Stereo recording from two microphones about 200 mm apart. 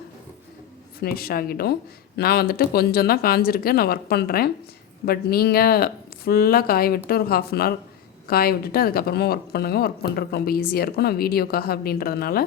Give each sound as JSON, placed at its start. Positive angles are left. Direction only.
{"t": 1.0, "sound": "speech", "side_deg": 50}